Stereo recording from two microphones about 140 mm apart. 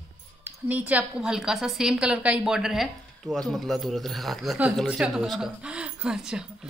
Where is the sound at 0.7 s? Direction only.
10° right (ahead or behind).